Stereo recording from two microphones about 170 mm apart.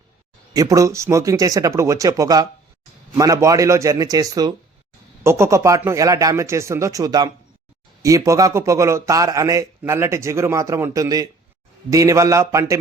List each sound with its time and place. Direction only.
0.5 s a man's voice: 20° right (ahead or behind)